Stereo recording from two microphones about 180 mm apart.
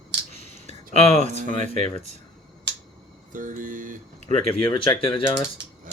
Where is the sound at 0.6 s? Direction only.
40° right (ahead or behind).